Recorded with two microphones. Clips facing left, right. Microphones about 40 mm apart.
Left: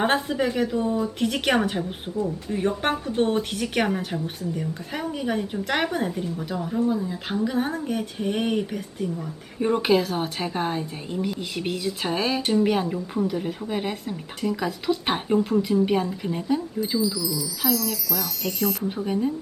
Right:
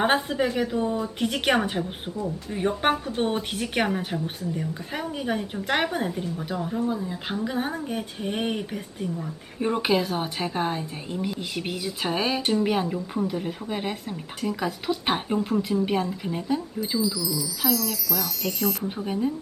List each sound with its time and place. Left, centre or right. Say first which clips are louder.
0.0 s speech: even; centre